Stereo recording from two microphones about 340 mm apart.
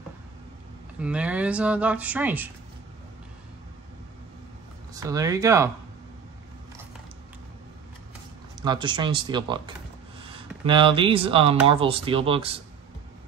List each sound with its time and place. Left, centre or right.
0.9 s speech: centre
4.9 s speech: centre
8.5 s speech: centre